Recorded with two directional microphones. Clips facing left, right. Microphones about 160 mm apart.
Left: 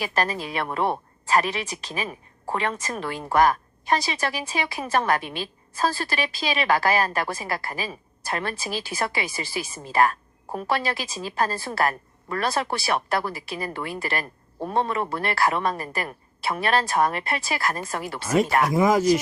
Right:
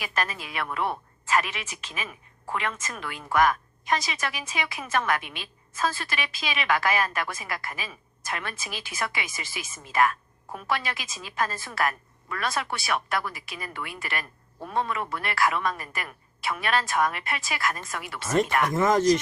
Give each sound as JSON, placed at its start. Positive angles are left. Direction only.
{"t": 0.0, "sound": "a woman's voice", "side_deg": 35}
{"t": 18.3, "sound": "speech", "side_deg": 5}